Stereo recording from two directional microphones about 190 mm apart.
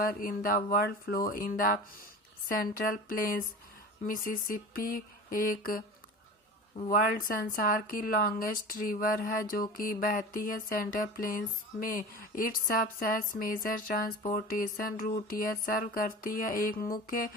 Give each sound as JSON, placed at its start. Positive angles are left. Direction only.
{"t": 0.0, "sound": "a woman's voice", "side_deg": 50}